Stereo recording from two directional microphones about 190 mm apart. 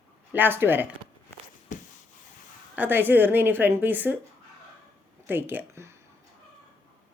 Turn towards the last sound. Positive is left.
turn(degrees=-15)  # may be behind; listen again after turning